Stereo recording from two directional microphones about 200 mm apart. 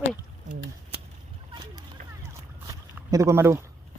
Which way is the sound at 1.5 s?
20° right (ahead or behind).